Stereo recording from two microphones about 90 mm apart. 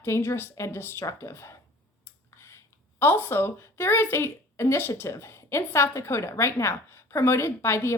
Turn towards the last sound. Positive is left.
turn(degrees=30)  # may be behind; listen again after turning